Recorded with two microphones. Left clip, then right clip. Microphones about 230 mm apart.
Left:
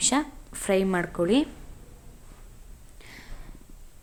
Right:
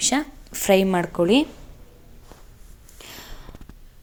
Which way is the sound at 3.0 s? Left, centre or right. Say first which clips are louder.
Right 7 dB; centre.